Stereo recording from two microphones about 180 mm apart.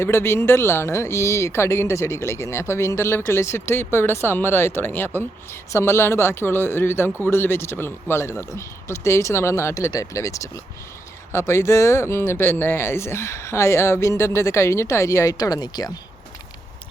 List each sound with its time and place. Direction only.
0.0 s speech: 15° left (ahead or behind)